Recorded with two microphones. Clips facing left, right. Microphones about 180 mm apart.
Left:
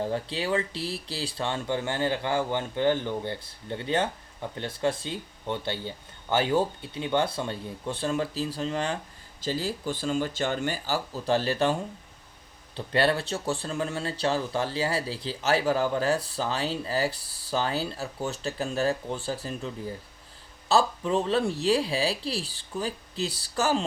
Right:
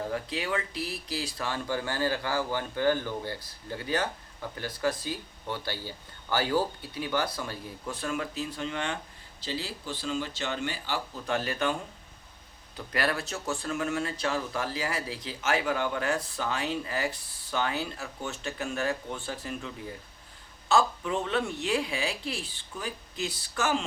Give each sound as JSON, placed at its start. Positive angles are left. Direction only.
{"t": 0.0, "sound": "speech", "side_deg": 30}
{"t": 9.4, "sound": "speech", "side_deg": 45}